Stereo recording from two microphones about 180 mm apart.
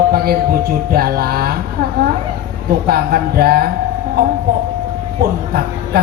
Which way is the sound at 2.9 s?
55° right (ahead or behind).